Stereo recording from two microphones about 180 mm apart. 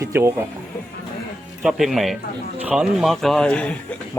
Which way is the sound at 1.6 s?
Centre (ahead or behind).